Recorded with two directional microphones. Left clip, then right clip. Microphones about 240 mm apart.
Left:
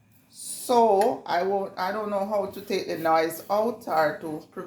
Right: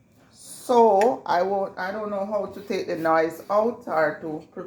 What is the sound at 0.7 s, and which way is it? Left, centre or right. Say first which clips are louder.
A woman's voice: right 3 dB; right.